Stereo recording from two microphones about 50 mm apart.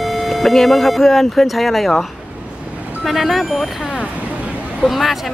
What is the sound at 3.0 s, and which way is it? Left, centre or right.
Speech, centre.